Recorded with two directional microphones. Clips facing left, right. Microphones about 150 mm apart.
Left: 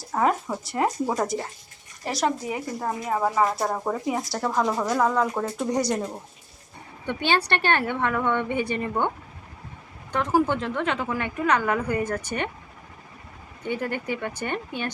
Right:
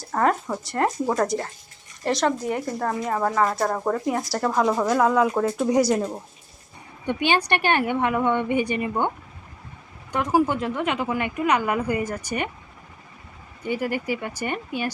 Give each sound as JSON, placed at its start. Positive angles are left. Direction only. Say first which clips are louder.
{"t": 0.0, "sound": "speech", "louder": "right 1 dB", "side_deg": 5}
{"t": 7.1, "sound": "speech", "louder": "right 2 dB", "side_deg": -15}
{"t": 10.1, "sound": "speech", "louder": "right 1 dB", "side_deg": -10}
{"t": 13.7, "sound": "speech", "louder": "right 2 dB", "side_deg": -10}